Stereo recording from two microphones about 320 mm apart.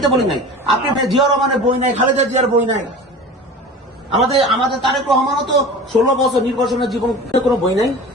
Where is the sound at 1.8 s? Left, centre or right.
Right.